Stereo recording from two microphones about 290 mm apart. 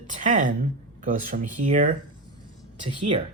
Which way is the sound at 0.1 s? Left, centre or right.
Right.